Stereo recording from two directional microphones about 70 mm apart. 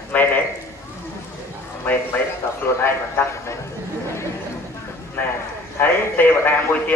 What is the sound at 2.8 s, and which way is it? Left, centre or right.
Speech, left.